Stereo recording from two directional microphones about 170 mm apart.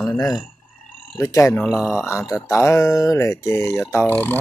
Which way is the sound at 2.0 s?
20° left (ahead or behind).